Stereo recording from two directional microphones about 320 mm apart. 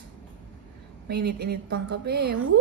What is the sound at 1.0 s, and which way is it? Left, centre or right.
A woman's voice, right.